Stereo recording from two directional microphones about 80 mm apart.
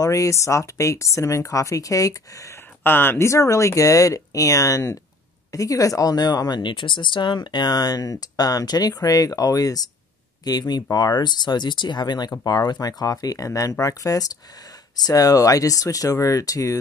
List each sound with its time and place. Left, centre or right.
0.0 s speech: left
2.8 s speech: left
6.6 s speech: left